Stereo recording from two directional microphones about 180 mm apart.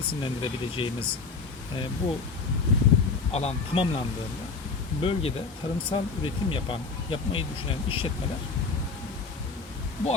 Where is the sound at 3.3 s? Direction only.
35° left (ahead or behind).